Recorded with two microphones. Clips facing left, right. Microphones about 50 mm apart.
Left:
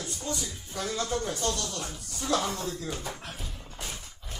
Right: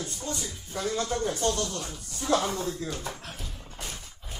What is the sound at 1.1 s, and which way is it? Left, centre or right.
Speech, right.